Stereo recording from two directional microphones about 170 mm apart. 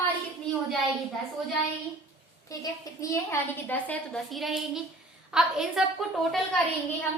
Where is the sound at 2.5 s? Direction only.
20° left (ahead or behind); by 6.4 s centre (ahead or behind).